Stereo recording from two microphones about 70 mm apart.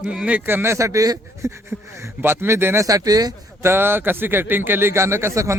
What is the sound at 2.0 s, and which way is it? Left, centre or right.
Speech, right.